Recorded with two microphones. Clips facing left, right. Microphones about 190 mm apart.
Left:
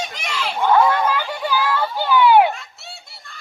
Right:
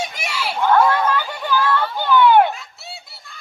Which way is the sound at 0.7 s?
10° left (ahead or behind).